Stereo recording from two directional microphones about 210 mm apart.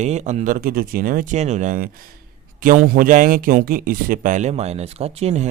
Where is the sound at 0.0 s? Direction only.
35° right (ahead or behind).